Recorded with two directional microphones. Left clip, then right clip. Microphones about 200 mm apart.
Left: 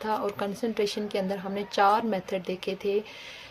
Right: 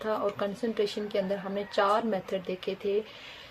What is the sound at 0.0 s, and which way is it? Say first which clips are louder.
Speech: left 1 dB; 30° left (ahead or behind).